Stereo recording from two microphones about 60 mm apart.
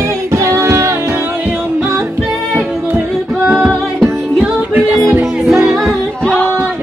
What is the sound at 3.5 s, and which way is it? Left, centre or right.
Music, centre.